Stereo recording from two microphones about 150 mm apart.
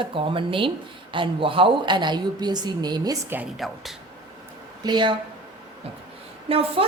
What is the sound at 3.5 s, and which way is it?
Speech, centre (ahead or behind).